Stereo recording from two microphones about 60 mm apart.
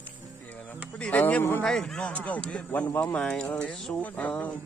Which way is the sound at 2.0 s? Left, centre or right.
Left.